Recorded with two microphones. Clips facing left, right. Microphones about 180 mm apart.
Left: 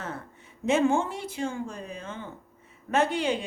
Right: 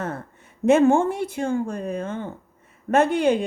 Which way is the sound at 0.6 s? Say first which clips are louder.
Right 7 dB; 55° right (ahead or behind).